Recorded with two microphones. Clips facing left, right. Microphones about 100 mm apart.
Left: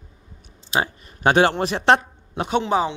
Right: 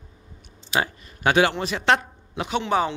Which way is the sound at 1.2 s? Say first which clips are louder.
Left 3 dB; 40° left (ahead or behind).